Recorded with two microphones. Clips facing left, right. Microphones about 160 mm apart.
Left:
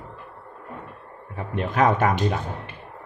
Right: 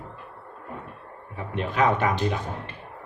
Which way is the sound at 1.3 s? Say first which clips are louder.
Left 2 dB; 45° left (ahead or behind).